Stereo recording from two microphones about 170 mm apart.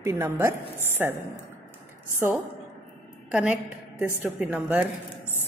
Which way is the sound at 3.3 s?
10° right (ahead or behind).